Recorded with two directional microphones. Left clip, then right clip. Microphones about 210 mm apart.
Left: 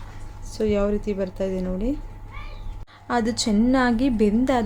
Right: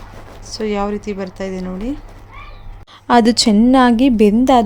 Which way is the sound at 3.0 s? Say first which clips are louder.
Right 11 dB; 35° right (ahead or behind).